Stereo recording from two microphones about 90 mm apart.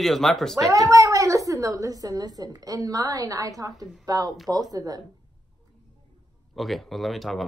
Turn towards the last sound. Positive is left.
turn(degrees=0)  # may be behind; listen again after turning